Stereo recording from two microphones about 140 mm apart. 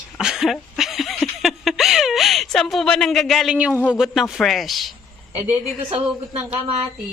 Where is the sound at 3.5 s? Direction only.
10° right (ahead or behind).